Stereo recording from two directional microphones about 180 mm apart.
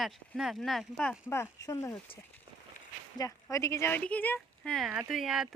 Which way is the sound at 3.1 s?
20° left (ahead or behind).